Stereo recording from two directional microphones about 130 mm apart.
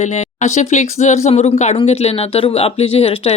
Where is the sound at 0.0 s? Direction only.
65° left (ahead or behind).